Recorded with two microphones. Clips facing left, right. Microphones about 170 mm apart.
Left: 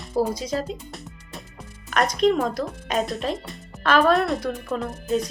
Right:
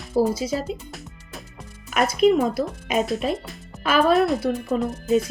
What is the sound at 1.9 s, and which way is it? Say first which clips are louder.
Speech: right 2 dB; 5° right (ahead or behind).